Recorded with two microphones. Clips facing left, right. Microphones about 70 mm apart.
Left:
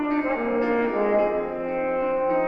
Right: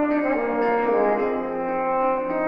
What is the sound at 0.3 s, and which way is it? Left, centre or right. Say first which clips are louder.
Brass instrument: right 2 dB; right.